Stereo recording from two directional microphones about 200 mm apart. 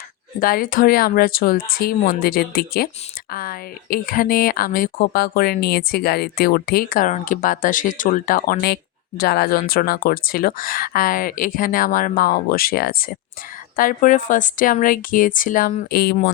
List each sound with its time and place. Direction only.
0.3 s speech: 45° left (ahead or behind)